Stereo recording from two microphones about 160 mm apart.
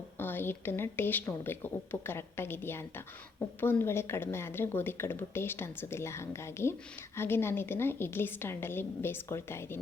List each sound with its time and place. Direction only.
0.2 s a woman's voice: 15° left (ahead or behind)